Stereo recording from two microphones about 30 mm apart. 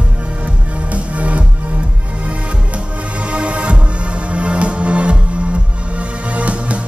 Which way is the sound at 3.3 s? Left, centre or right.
Right.